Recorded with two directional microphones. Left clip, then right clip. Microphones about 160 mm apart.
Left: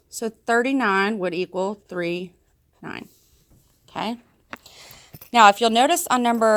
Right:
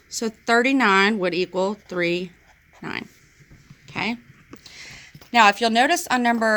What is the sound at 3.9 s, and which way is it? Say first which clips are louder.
Speech: right 2 dB; 40° left (ahead or behind).